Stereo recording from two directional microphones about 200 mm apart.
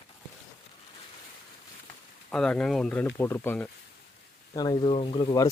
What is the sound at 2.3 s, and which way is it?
Speech, 5° left (ahead or behind).